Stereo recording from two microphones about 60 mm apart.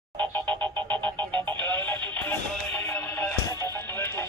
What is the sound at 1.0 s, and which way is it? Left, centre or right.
Music, left.